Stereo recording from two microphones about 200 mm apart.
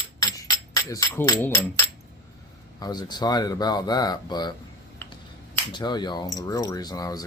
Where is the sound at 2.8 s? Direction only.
20° left (ahead or behind).